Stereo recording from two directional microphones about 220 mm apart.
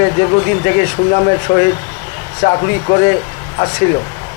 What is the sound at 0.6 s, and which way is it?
Speech, 15° left (ahead or behind).